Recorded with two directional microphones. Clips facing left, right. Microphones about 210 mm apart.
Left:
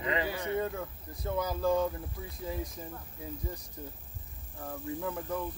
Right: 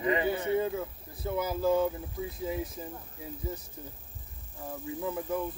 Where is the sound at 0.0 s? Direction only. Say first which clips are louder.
Right 5 dB; 20° right (ahead or behind).